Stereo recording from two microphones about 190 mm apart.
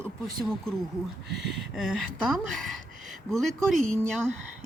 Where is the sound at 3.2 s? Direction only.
Centre (ahead or behind).